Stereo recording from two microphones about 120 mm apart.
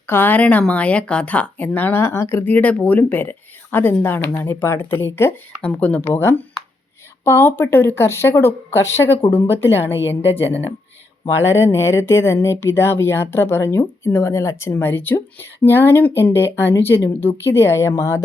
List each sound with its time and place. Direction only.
0.1 s speech: 15° left (ahead or behind)
11.3 s speech: 20° left (ahead or behind)